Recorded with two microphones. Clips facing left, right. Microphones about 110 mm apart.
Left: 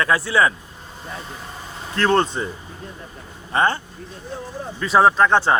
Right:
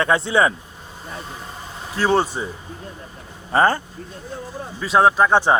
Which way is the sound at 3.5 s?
40° right (ahead or behind).